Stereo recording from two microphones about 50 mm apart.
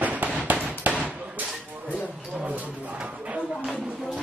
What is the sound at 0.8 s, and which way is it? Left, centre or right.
Basketball bounce, right.